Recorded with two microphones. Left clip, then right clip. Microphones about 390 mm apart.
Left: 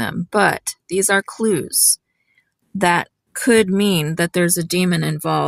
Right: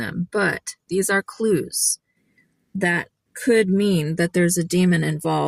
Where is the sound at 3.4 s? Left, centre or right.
Left.